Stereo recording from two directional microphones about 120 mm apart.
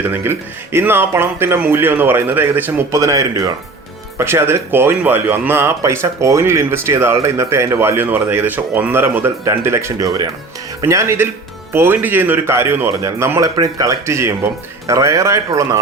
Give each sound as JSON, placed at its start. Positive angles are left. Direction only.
{"t": 0.1, "sound": "speech", "side_deg": -20}